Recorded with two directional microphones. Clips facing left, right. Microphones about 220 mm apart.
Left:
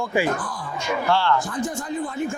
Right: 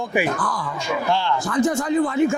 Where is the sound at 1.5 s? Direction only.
85° right.